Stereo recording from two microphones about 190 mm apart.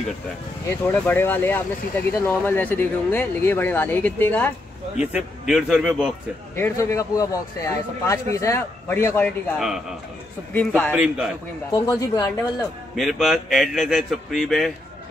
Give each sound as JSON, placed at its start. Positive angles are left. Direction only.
{"t": 0.8, "sound": "speech", "side_deg": 10}
{"t": 5.5, "sound": "a man's voice", "side_deg": -5}
{"t": 6.5, "sound": "speech", "side_deg": 15}
{"t": 9.6, "sound": "a man's voice", "side_deg": 0}
{"t": 10.9, "sound": "a man's voice", "side_deg": -5}
{"t": 11.7, "sound": "speech", "side_deg": 15}
{"t": 12.9, "sound": "a man's voice", "side_deg": 0}